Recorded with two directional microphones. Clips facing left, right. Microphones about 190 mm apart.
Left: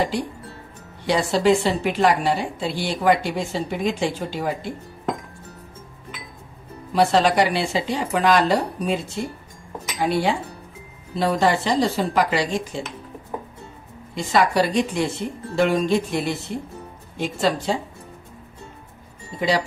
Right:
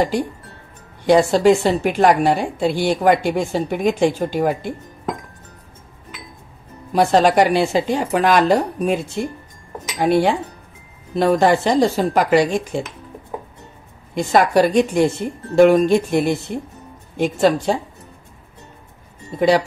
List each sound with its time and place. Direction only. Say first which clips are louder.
1.0 s a woman's voice: right 6 dB; 45° right (ahead or behind)
6.9 s a woman's voice: right 3 dB; 45° right (ahead or behind)
14.1 s a woman's voice: right 4 dB; 50° right (ahead or behind)